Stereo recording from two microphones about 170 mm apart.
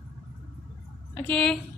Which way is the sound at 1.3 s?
5° left (ahead or behind).